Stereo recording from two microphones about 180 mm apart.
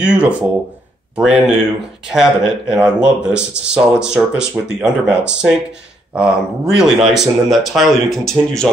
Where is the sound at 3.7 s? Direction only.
5° right (ahead or behind).